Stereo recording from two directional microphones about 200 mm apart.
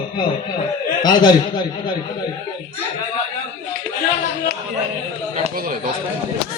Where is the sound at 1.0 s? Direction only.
20° left (ahead or behind).